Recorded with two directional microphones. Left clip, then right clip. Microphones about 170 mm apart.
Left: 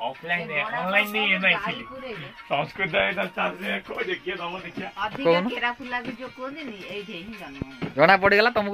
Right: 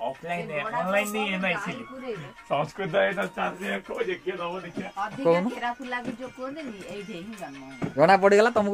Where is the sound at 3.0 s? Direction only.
15° left (ahead or behind).